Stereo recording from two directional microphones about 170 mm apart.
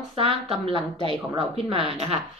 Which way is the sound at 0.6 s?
30° right (ahead or behind).